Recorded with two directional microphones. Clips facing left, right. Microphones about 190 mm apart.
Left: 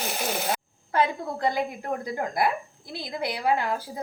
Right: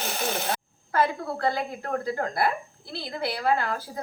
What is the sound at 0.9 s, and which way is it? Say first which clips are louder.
A woman's voice: even; 20° left (ahead or behind).